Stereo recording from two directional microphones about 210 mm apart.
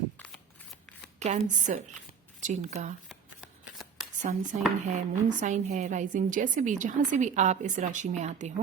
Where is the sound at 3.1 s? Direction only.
Centre (ahead or behind).